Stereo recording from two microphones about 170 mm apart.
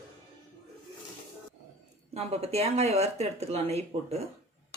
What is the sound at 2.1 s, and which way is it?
Speech, 40° right (ahead or behind).